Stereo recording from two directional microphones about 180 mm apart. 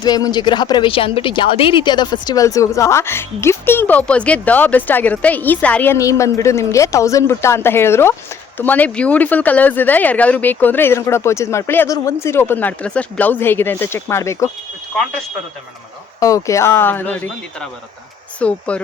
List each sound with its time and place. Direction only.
0.0 s speech: 25° left (ahead or behind)
16.2 s speech: 15° left (ahead or behind)